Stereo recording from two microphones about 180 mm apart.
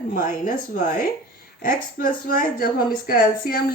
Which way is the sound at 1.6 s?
50° left (ahead or behind).